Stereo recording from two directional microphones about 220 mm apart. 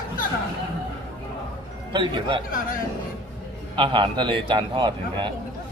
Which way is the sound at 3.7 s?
20° right (ahead or behind).